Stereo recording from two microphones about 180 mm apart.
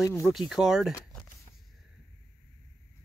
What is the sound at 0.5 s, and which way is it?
Speech, centre (ahead or behind).